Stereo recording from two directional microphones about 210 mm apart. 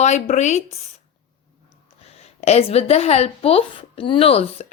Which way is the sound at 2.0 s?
30° left (ahead or behind).